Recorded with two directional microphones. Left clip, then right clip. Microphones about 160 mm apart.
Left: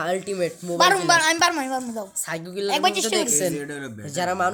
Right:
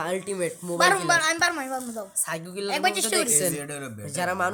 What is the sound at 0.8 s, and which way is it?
A woman's voice, 25° left (ahead or behind).